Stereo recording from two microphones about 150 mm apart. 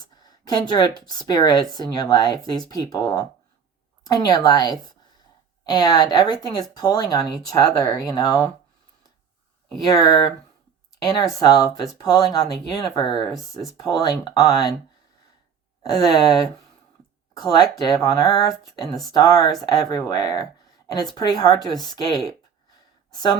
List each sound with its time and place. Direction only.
0.0 s speech: 25° left (ahead or behind)
9.6 s speech: 25° left (ahead or behind)
15.8 s speech: 25° left (ahead or behind)